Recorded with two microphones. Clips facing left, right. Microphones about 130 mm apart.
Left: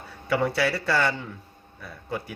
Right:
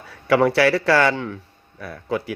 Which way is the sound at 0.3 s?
90° right.